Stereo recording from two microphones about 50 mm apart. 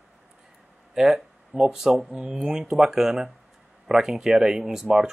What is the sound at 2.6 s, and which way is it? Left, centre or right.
Speech, centre.